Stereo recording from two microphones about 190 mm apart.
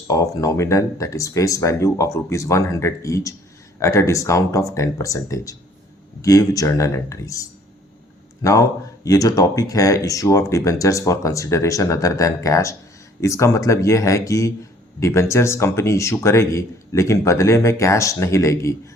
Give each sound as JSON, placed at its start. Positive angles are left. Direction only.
{"t": 0.1, "sound": "speech", "side_deg": 15}